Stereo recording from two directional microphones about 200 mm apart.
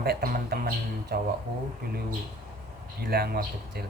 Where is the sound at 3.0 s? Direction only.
50° right (ahead or behind).